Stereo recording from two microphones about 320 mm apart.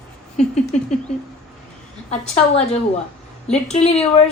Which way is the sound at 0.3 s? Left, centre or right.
Left.